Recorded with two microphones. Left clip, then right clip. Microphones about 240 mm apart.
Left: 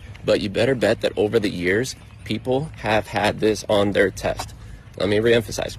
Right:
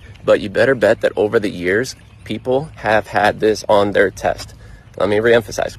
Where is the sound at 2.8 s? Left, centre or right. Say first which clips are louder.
Right 7 dB; centre.